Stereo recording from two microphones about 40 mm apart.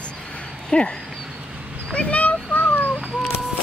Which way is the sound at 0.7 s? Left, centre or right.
Left.